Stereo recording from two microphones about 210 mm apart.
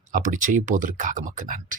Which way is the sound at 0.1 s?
40° right (ahead or behind).